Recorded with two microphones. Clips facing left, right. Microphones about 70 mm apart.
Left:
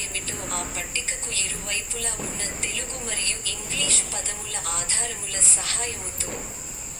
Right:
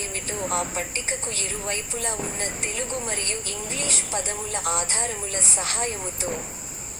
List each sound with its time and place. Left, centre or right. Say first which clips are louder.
0.3 s a woman's voice: right 6 dB; right